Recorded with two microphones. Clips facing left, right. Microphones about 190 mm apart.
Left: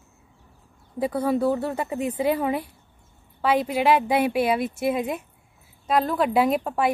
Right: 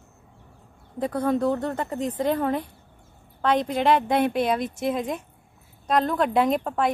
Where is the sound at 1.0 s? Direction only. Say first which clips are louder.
Left 1 dB; 5° left (ahead or behind).